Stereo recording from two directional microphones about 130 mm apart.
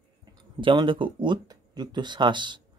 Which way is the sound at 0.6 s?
40° right (ahead or behind).